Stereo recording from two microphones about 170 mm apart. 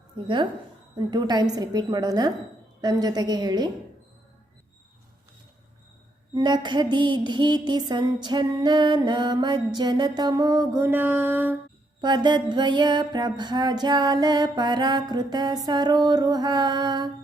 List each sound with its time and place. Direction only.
0.9 s music: 25° right (ahead or behind)
6.3 s music: 25° right (ahead or behind)
11.9 s music: 25° right (ahead or behind)